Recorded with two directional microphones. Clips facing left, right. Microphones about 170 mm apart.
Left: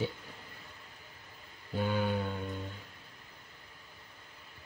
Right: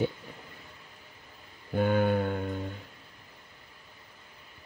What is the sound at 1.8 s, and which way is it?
Mantra, 55° right (ahead or behind).